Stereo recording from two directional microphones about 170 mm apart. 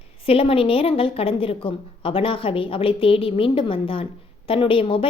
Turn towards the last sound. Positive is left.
turn(degrees=35)  # may be behind; listen again after turning